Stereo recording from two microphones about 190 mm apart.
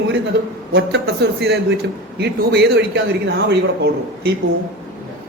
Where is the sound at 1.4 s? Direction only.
65° right (ahead or behind).